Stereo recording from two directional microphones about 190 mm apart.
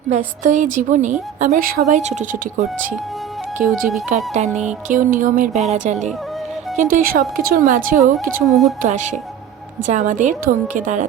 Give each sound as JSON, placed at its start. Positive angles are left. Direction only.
{"t": 0.1, "sound": "a woman's voice", "side_deg": -40}